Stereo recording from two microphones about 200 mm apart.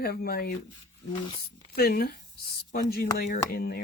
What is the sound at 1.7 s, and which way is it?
Speech, 50° left (ahead or behind).